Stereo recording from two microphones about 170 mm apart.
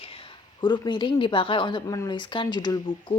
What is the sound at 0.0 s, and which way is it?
A woman's voice, 35° left (ahead or behind).